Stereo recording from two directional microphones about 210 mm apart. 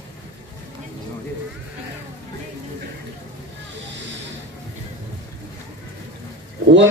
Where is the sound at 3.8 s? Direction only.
55° right (ahead or behind).